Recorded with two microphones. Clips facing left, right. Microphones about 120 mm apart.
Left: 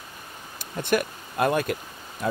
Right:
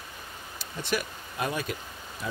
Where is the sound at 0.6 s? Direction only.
50° left (ahead or behind).